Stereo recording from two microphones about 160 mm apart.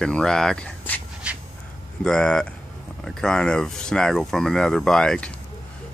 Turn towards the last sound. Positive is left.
turn(degrees=5)  # may be behind; listen again after turning